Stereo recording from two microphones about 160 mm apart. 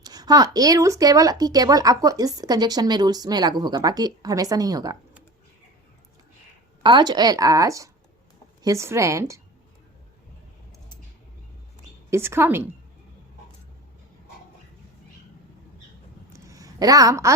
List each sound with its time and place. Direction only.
0.0 s speech: 25° right (ahead or behind)
6.8 s speech: 30° right (ahead or behind)
12.1 s a woman's voice: 15° right (ahead or behind)
16.5 s a woman's voice: 20° right (ahead or behind)